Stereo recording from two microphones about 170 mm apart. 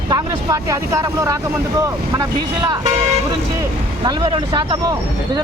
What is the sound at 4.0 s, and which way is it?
Speech, 30° right (ahead or behind).